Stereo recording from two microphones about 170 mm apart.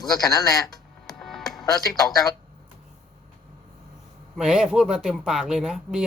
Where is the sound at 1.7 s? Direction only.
20° left (ahead or behind).